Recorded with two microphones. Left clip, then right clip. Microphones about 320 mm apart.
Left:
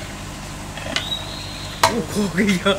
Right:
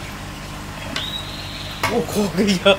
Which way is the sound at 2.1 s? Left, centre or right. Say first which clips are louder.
Right 1 dB; right.